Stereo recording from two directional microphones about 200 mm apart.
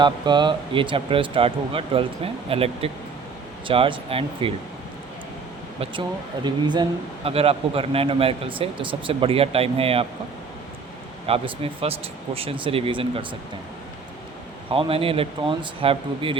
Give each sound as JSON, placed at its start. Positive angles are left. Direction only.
{"t": 0.0, "sound": "speech", "side_deg": -20}
{"t": 5.8, "sound": "speech", "side_deg": -25}
{"t": 11.3, "sound": "speech", "side_deg": -30}
{"t": 14.7, "sound": "speech", "side_deg": -25}